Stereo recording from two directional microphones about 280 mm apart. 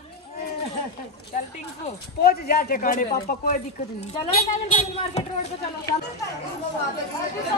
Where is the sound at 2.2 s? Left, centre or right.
Left.